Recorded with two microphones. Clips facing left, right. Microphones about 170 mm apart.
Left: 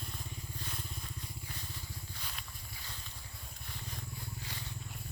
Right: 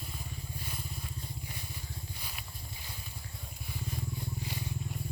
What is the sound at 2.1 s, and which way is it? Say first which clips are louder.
Walk: right 1 dB; 10° right (ahead or behind).